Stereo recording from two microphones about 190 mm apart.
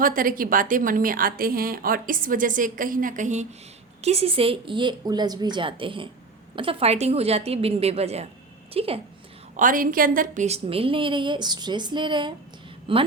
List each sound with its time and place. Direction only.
0.0 s a woman's voice: 45° right (ahead or behind); by 9.0 s 30° right (ahead or behind)
9.6 s a woman's voice: 45° right (ahead or behind); by 13.0 s 30° right (ahead or behind)